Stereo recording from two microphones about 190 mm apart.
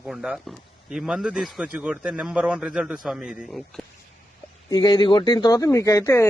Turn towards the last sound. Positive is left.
turn(degrees=15)  # may be behind; listen again after turning